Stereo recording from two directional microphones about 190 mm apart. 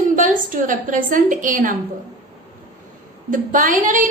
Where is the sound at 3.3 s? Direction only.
45° right (ahead or behind).